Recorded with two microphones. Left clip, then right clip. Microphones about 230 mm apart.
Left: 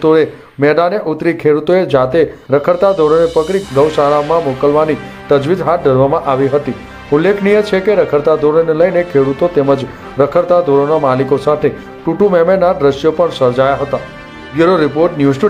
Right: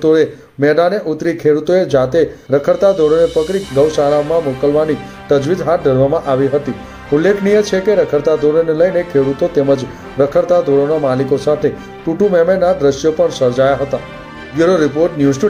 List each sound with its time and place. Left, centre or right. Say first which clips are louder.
0.0 s speech: left 1 dB; centre